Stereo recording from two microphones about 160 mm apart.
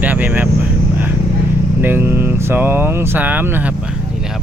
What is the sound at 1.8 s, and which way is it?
Speech, 15° right (ahead or behind).